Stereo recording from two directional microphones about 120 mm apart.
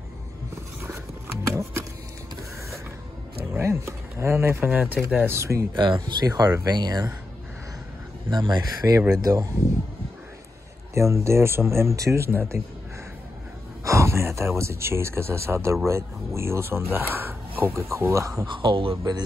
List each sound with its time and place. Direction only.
0.8 s a sound: 20° right (ahead or behind)
3.5 s speech: 20° right (ahead or behind)
5.8 s speech: 40° right (ahead or behind)
8.3 s speech: 40° right (ahead or behind)
11.0 s speech: 25° right (ahead or behind)
13.8 s speech: 25° right (ahead or behind)
18.5 s speech: 45° right (ahead or behind)